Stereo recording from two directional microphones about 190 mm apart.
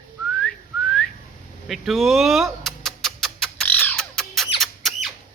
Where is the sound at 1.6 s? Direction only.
Centre (ahead or behind).